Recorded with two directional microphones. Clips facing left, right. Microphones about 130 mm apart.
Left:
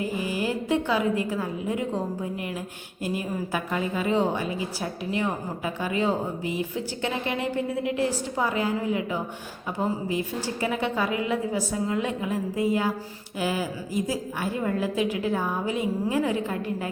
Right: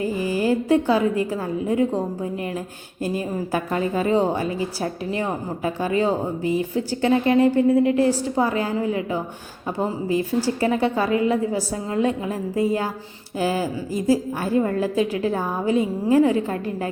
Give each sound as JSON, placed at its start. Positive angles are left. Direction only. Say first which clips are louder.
{"t": 0.0, "sound": "a woman's voice", "louder": "right 5 dB", "side_deg": -35}
{"t": 3.0, "sound": "a woman's voice", "louder": "right 4 dB", "side_deg": -35}
{"t": 10.1, "sound": "a woman's voice", "louder": "right 7 dB", "side_deg": -35}